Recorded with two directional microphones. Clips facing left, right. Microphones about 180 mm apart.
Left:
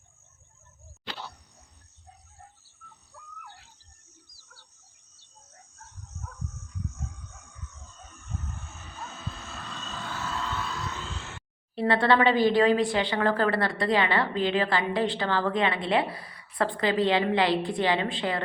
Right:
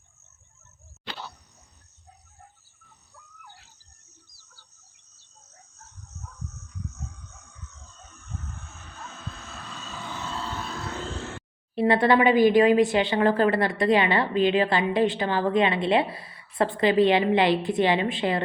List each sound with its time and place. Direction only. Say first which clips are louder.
7.4 s a sound: left 1 dB; 10° left (ahead or behind)
9.5 s vehicle: even; 5° right (ahead or behind); by 11.4 s 45° right (ahead or behind)
11.7 s speech: right 3 dB; 20° right (ahead or behind)